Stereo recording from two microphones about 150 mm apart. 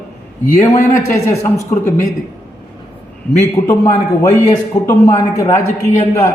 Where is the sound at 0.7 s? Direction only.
20° left (ahead or behind).